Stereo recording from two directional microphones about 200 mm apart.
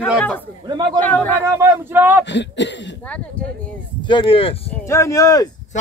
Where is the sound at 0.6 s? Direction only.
20° right (ahead or behind).